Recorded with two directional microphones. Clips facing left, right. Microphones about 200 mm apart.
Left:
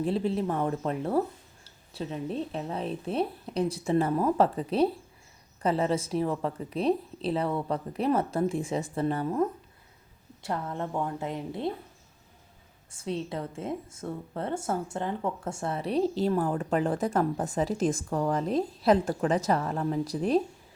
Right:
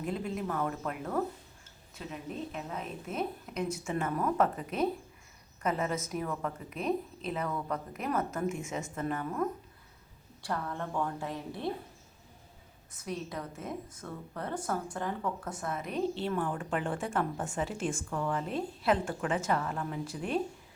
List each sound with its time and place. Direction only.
0.0 s a woman's voice: 30° left (ahead or behind)
12.9 s a woman's voice: 30° left (ahead or behind)